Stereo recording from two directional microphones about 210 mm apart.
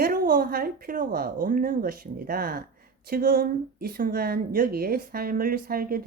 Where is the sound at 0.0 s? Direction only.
45° right (ahead or behind).